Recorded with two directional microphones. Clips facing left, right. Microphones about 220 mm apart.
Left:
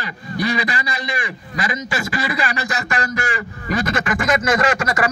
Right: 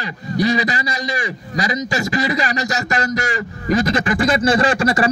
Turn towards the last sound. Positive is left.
turn(degrees=-30)  # may be behind; listen again after turning